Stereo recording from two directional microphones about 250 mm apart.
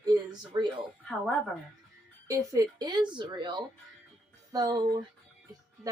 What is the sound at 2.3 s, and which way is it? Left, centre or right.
Speech, centre.